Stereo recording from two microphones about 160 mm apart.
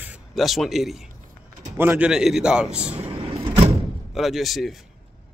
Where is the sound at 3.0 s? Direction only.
35° right (ahead or behind).